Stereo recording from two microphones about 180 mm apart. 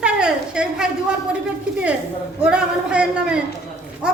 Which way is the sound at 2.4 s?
5° right (ahead or behind).